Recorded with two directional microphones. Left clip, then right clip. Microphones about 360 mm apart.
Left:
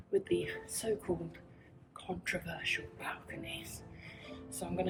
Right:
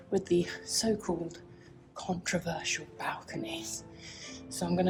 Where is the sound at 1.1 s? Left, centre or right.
Right.